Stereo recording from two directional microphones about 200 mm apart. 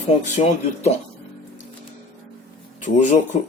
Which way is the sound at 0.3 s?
35° left (ahead or behind).